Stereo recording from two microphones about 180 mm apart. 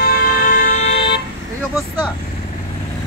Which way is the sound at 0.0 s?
50° left (ahead or behind).